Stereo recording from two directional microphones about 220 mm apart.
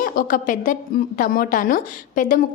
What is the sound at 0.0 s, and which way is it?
A woman's voice, 40° left (ahead or behind).